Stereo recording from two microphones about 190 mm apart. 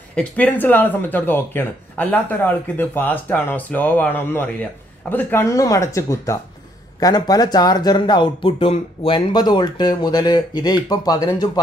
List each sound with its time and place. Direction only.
0.1 s speech: 5° left (ahead or behind)